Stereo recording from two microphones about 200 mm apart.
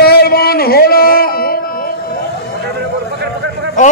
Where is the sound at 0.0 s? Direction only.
50° left (ahead or behind).